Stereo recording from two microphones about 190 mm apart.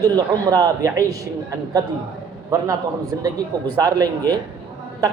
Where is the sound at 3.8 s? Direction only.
20° right (ahead or behind).